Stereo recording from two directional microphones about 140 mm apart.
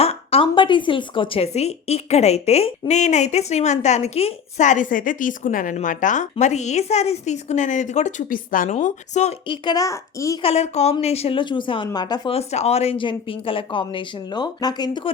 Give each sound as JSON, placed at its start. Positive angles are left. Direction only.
{"t": 0.0, "sound": "a woman's voice", "side_deg": 45}
{"t": 6.4, "sound": "a woman's voice", "side_deg": 55}
{"t": 9.5, "sound": "a child's voice", "side_deg": 30}
{"t": 10.4, "sound": "speech", "side_deg": 50}
{"t": 12.3, "sound": "speech", "side_deg": 50}